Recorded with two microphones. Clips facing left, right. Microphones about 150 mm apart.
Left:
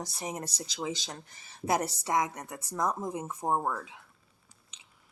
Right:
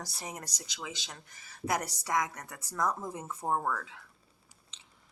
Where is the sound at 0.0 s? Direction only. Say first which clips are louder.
Left 5 dB; 20° left (ahead or behind).